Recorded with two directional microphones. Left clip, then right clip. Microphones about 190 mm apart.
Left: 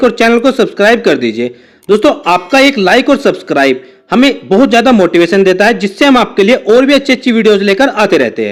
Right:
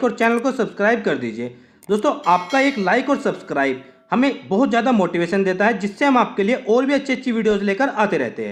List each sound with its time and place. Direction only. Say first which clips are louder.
0.0 s speech: left 10 dB; 30° left (ahead or behind)